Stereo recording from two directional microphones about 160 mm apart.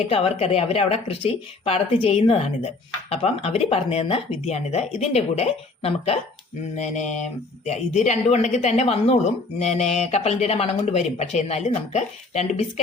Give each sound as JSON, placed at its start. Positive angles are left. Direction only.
{"t": 0.1, "sound": "speech", "side_deg": 40}